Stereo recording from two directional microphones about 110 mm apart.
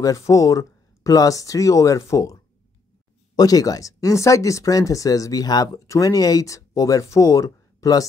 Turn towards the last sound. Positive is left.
turn(degrees=35)  # may be behind; listen again after turning